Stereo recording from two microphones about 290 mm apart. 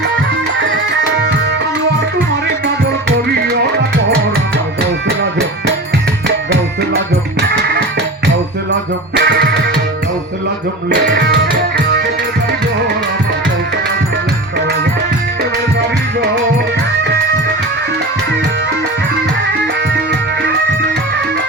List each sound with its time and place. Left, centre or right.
8.7 s music: right
10.8 s music: right